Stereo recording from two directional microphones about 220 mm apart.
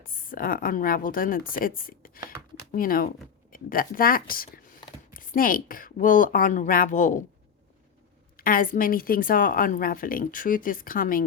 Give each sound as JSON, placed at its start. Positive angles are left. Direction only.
{"t": 0.0, "sound": "a woman's voice", "side_deg": 40}
{"t": 8.4, "sound": "a woman's voice", "side_deg": 40}